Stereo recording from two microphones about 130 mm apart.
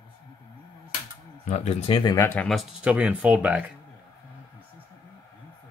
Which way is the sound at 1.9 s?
35° left (ahead or behind).